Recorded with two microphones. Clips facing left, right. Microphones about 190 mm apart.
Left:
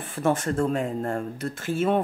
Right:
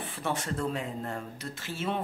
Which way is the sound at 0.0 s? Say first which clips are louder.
Left 9 dB; 50° left (ahead or behind).